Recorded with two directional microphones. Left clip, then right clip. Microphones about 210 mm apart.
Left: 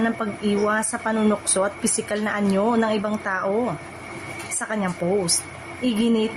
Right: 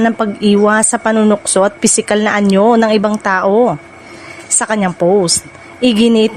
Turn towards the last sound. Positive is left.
turn(degrees=-45)  # may be behind; listen again after turning